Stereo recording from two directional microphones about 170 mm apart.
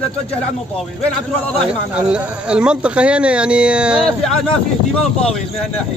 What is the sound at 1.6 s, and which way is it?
Speech, 5° right (ahead or behind).